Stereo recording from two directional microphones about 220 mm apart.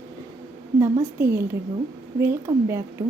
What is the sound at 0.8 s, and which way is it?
A woman's voice, 10° right (ahead or behind).